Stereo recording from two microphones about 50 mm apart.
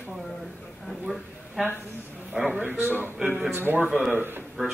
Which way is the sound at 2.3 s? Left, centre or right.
Centre.